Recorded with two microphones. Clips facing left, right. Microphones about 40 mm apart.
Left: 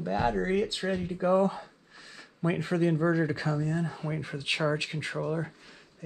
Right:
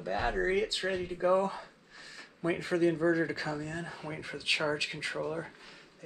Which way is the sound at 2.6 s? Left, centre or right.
Left.